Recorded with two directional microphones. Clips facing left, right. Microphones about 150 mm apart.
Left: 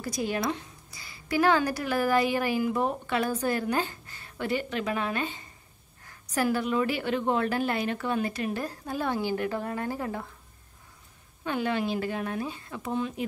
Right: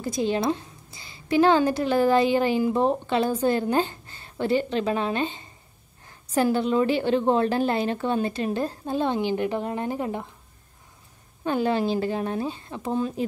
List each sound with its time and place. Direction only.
0.0 s a woman's voice: 25° right (ahead or behind)
11.4 s a woman's voice: 35° right (ahead or behind)